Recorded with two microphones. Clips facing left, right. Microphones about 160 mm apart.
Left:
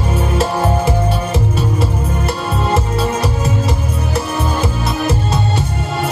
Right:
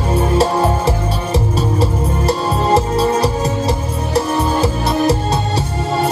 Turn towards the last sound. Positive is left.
turn(degrees=-35)  # may be behind; listen again after turning